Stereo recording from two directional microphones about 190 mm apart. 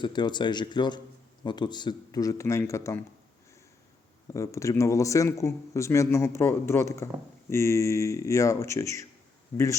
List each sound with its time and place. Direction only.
0.0 s speech: 25° left (ahead or behind)
4.3 s speech: 15° left (ahead or behind)